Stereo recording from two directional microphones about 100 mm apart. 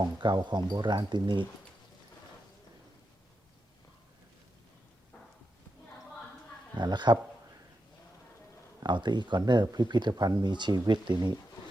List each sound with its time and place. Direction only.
0.0 s speech: 45° right (ahead or behind)
6.7 s speech: 50° right (ahead or behind)
8.8 s speech: 45° right (ahead or behind)